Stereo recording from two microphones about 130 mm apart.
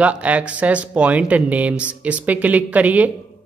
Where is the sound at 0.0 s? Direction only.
10° right (ahead or behind).